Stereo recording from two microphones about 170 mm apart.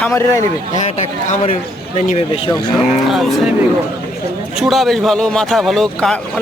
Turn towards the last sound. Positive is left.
turn(degrees=0)  # may be behind; listen again after turning